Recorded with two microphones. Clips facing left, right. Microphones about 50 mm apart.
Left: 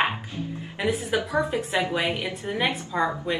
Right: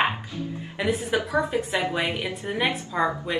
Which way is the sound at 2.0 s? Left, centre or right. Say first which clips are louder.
Even; right.